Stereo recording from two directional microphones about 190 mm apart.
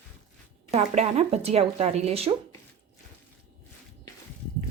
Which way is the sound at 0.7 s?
35° right (ahead or behind).